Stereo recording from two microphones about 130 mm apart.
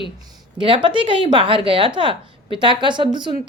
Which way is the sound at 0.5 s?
40° right (ahead or behind).